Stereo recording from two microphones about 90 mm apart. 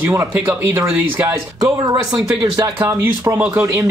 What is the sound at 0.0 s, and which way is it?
Speech, 30° right (ahead or behind).